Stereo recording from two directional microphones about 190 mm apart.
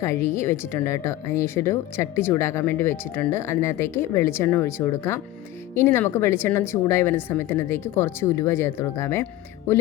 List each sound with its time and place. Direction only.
0.0 s speech: 15° left (ahead or behind)